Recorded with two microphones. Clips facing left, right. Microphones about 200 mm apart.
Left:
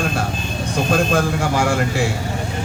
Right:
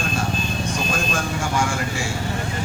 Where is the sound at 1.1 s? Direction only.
65° left (ahead or behind).